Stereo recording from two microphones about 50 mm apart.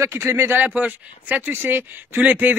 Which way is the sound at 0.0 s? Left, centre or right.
Right.